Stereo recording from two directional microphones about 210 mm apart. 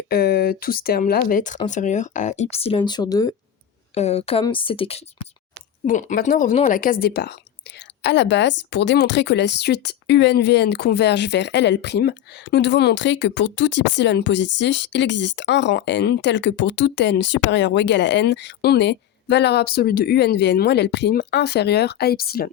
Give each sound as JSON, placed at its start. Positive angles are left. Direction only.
{"t": 0.1, "sound": "speech", "side_deg": 45}
{"t": 3.9, "sound": "a woman's voice", "side_deg": 30}
{"t": 5.8, "sound": "speech", "side_deg": 35}